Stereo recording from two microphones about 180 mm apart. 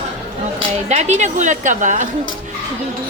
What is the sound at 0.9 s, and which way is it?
A woman's voice, 40° right (ahead or behind).